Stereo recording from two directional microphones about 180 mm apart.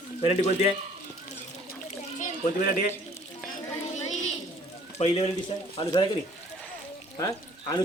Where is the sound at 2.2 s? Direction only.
45° left (ahead or behind).